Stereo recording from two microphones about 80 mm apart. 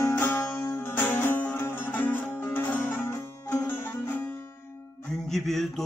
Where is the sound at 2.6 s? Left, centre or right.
Left.